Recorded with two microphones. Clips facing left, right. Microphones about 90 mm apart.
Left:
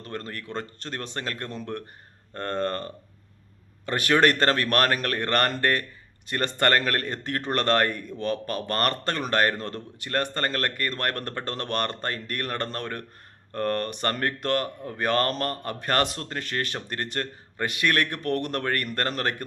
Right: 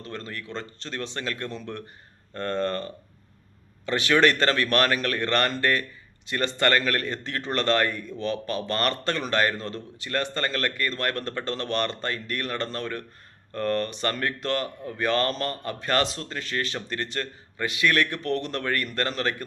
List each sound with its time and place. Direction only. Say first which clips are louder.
0.0 s speech: left 1 dB; 50° left (ahead or behind)